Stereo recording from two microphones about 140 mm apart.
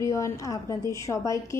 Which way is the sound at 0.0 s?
20° left (ahead or behind).